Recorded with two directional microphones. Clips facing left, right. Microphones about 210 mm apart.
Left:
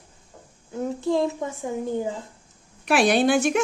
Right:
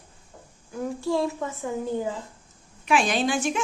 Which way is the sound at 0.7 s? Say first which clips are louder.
Left 2 dB; 20° left (ahead or behind).